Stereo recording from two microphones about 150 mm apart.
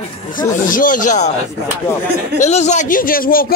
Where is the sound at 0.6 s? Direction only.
65° left (ahead or behind).